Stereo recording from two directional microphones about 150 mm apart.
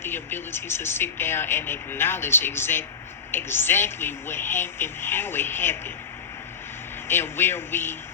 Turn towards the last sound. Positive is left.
turn(degrees=15)  # may be behind; listen again after turning